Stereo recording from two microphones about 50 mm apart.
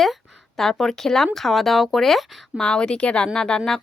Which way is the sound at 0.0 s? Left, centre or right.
Centre.